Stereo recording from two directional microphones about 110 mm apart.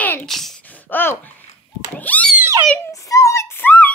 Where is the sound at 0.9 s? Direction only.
20° left (ahead or behind).